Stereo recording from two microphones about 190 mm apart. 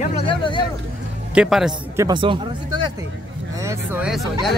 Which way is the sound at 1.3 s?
5° right (ahead or behind).